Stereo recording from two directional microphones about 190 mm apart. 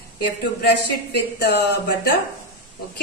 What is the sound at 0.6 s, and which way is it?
A woman's voice, 60° left (ahead or behind).